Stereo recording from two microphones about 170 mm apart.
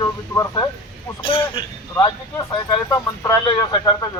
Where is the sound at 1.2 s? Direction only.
30° left (ahead or behind).